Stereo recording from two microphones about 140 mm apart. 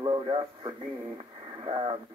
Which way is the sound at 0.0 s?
35° right (ahead or behind).